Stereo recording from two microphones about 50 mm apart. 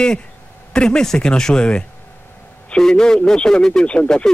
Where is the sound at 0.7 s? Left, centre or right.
Centre.